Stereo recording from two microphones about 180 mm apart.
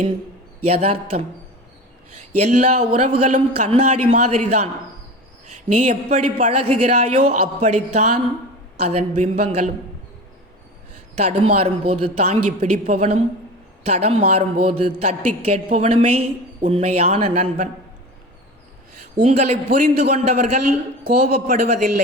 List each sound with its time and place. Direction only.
0.7 s a woman's voice: 35° right (ahead or behind)
2.4 s a woman's voice: 40° right (ahead or behind)
11.1 s a woman's voice: 40° right (ahead or behind)
19.2 s a woman's voice: 35° right (ahead or behind)